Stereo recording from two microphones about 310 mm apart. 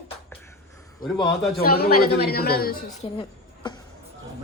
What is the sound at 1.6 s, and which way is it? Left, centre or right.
A man's voice, left.